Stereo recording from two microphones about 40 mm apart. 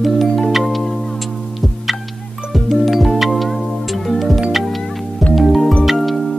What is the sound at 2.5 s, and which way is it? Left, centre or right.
Music, centre.